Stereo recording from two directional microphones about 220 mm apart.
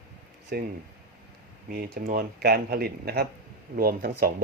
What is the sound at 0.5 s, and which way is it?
Speech, 45° right (ahead or behind).